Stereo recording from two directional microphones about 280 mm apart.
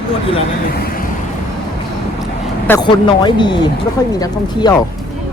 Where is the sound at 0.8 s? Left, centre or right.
Left.